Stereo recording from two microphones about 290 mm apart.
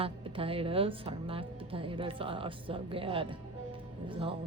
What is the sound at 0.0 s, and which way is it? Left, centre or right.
A woman's voice, centre.